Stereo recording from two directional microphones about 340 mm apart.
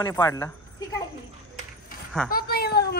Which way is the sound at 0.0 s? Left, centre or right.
Centre.